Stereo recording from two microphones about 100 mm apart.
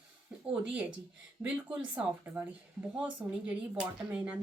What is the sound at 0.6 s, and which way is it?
Speech, 10° right (ahead or behind).